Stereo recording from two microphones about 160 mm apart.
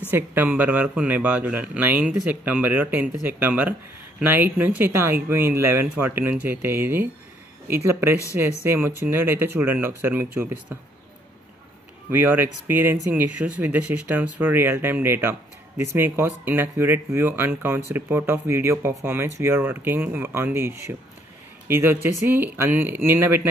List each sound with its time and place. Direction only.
0.1 s speech: 10° right (ahead or behind)
12.1 s speech: 15° right (ahead or behind)